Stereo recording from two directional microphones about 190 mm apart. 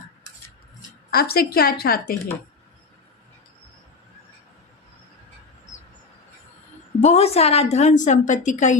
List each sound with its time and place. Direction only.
1.1 s a woman's voice: 55° left (ahead or behind)
7.0 s a woman's voice: 35° left (ahead or behind)